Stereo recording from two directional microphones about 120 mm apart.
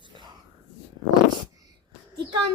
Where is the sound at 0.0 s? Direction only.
40° right (ahead or behind).